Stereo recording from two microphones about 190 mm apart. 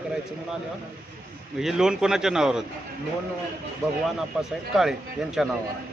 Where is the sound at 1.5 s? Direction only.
Centre (ahead or behind).